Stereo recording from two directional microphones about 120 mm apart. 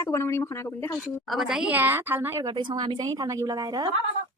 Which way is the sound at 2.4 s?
40° right (ahead or behind).